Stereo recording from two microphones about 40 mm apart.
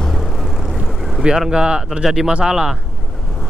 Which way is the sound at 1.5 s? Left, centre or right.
Right.